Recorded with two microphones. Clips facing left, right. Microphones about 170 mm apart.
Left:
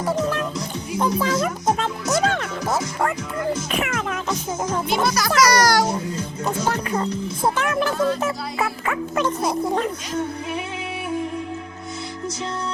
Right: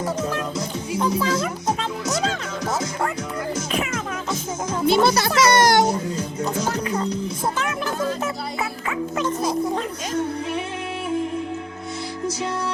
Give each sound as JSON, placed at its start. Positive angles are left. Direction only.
{"t": 0.9, "sound": "a child's voice", "side_deg": 50}
{"t": 3.7, "sound": "music", "side_deg": 65}
{"t": 4.9, "sound": "a child's voice", "side_deg": -30}
{"t": 6.7, "sound": "music", "side_deg": 60}